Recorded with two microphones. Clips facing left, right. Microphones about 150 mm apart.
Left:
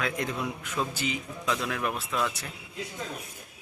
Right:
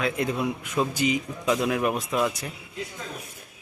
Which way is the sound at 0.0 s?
10° right (ahead or behind).